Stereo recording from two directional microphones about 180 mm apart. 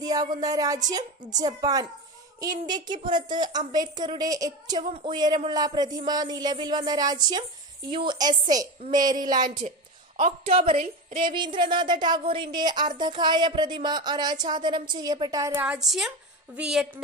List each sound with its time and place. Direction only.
0.0 s a sound: 20° right (ahead or behind)
0.4 s a woman's voice: 20° right (ahead or behind)
9.4 s a woman's voice: 45° right (ahead or behind)
10.1 s a woman's voice: 30° right (ahead or behind)
10.8 s a woman's voice: 50° right (ahead or behind)
11.3 s a woman's voice: 25° right (ahead or behind)
15.6 s a woman's voice: 5° right (ahead or behind)